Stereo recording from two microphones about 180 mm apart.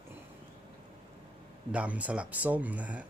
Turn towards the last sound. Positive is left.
turn(degrees=-10)  # may be behind; listen again after turning